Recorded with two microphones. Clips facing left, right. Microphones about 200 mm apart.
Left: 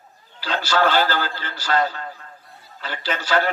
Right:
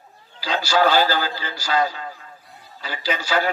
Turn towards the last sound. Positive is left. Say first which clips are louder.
# even
turn(degrees=-10)  # may be behind; listen again after turning